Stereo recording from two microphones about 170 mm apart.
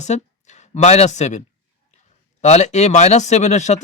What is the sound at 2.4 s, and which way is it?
Speech, 40° left (ahead or behind).